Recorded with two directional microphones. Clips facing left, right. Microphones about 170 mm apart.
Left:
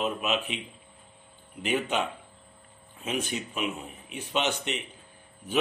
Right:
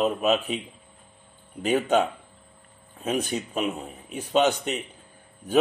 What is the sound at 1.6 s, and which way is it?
Speech, 40° right (ahead or behind).